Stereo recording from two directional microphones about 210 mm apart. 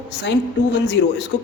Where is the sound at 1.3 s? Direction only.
55° left (ahead or behind).